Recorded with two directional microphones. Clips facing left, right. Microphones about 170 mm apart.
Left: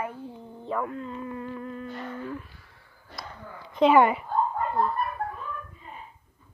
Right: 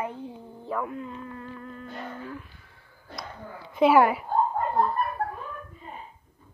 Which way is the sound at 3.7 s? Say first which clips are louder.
Even; 10° right (ahead or behind).